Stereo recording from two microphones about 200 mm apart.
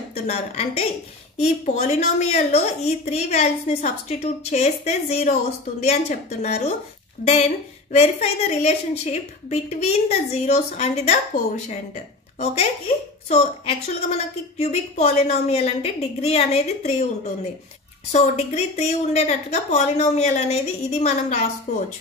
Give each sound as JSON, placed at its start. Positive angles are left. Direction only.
{"t": 0.1, "sound": "a woman's voice", "side_deg": 30}
{"t": 18.1, "sound": "a woman's voice", "side_deg": 35}